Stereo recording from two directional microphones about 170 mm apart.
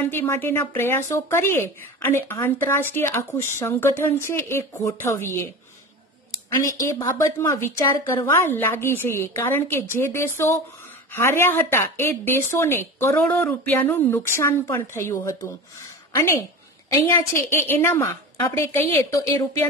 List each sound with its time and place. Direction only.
0.0 s speech: 15° left (ahead or behind)
6.6 s speech: 20° left (ahead or behind)
16.9 s speech: 15° left (ahead or behind)